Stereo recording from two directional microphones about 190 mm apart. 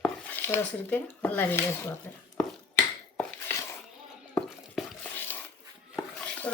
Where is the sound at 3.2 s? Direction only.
10° left (ahead or behind).